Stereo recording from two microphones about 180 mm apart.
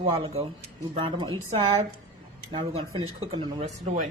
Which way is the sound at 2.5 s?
30° right (ahead or behind).